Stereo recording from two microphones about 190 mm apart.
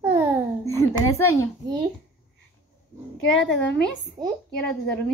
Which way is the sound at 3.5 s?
70° left (ahead or behind).